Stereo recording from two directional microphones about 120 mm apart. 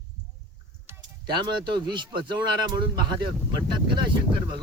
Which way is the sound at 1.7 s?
40° right (ahead or behind).